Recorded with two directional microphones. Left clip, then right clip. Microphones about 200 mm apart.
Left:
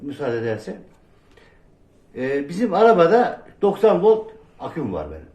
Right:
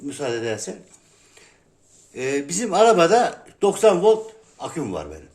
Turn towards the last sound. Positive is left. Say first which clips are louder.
# left 1 dB
turn(degrees=-55)  # may be behind; listen again after turning